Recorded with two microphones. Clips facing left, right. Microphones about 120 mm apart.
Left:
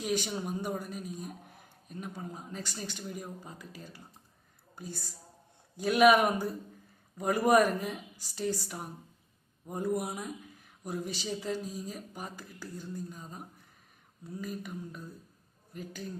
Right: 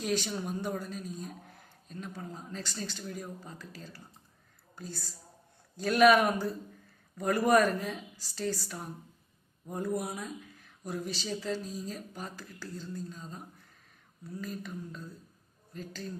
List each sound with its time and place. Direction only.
0.0 s a woman's voice: 15° left (ahead or behind)